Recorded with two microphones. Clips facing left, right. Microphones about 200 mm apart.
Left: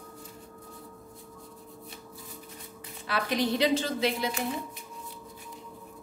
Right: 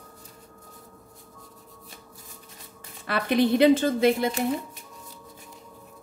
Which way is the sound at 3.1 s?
55° right (ahead or behind).